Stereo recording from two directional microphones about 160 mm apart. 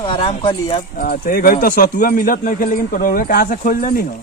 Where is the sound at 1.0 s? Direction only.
65° left (ahead or behind).